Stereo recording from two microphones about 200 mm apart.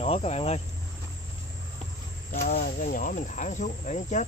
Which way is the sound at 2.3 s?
50° left (ahead or behind).